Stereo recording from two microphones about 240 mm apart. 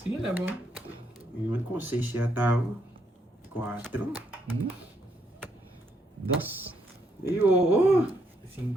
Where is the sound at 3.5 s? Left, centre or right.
Centre.